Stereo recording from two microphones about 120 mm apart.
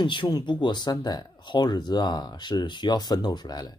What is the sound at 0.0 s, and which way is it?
Speech, 40° left (ahead or behind).